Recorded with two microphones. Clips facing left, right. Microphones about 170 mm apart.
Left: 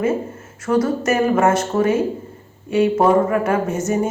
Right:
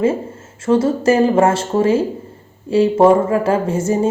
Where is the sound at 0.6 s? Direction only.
25° right (ahead or behind).